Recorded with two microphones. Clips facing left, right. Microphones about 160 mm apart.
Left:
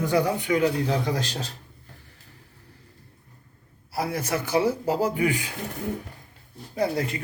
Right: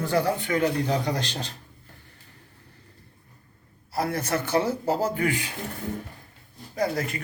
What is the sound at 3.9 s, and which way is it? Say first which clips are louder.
A man's voice: right 1 dB; 10° left (ahead or behind).